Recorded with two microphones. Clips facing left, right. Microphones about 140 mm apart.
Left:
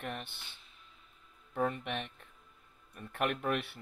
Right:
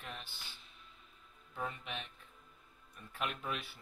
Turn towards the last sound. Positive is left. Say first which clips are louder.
# left 8 dB
turn(degrees=60)  # may be behind; listen again after turning